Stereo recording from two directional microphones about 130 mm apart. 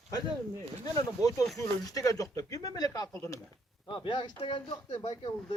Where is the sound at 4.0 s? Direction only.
35° left (ahead or behind).